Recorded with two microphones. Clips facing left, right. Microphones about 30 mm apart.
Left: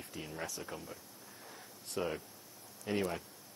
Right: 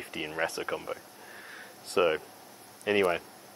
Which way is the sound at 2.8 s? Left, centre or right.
Right.